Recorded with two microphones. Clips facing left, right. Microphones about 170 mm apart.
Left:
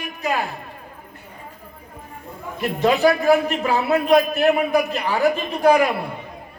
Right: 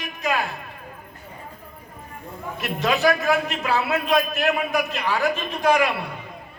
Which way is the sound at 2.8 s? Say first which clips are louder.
Left 4 dB; 35° left (ahead or behind).